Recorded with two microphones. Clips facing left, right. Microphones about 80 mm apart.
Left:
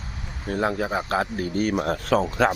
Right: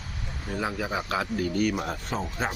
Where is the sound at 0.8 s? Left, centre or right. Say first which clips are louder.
Left 4 dB; left.